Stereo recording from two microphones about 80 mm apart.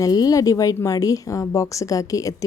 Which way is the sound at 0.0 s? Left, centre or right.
Left.